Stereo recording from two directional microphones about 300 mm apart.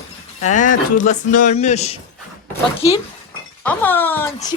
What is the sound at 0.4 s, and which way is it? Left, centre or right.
Speech, left.